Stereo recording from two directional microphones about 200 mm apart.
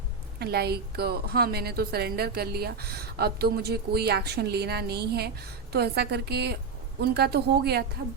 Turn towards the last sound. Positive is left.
turn(degrees=-55)  # may be behind; listen again after turning